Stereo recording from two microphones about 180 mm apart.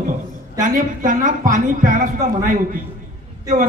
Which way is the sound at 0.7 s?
45° right (ahead or behind).